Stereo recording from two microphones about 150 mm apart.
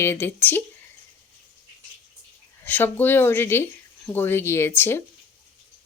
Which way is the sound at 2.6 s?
15° left (ahead or behind).